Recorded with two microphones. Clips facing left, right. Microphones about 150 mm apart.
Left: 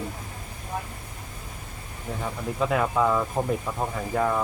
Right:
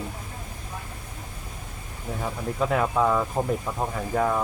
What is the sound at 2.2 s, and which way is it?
Speech, centre (ahead or behind).